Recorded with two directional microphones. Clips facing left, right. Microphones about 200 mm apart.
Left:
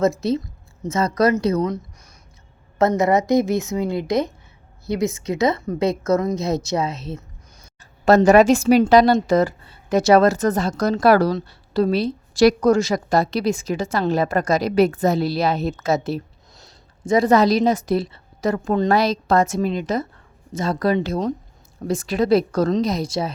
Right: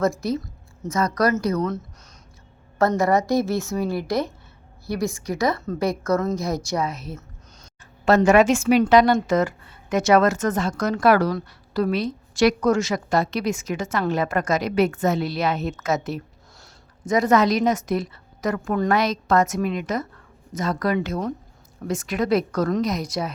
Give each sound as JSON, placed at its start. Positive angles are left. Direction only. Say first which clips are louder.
{"t": 0.0, "sound": "a woman's voice", "louder": "left 3 dB", "side_deg": 25}
{"t": 8.0, "sound": "a woman's voice", "louder": "left 3 dB", "side_deg": 40}